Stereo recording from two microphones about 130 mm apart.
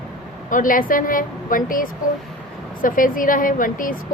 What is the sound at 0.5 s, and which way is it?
A woman's voice, 90° left.